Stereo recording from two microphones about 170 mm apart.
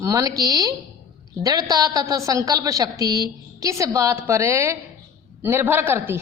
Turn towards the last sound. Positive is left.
turn(degrees=-15)  # may be behind; listen again after turning